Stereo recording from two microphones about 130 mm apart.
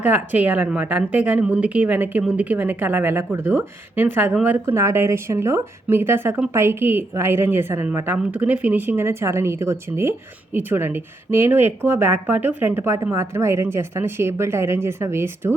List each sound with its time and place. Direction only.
0.0 s a woman's voice: 15° right (ahead or behind)